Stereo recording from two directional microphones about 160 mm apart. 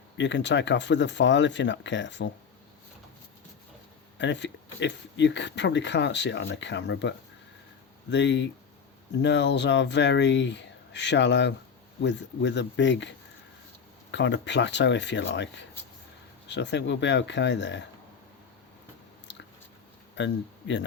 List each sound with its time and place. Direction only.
0.2 s speech: 90° left
4.2 s speech: 90° left
8.1 s speech: 90° left
14.2 s speech: 90° left
20.2 s speech: 90° left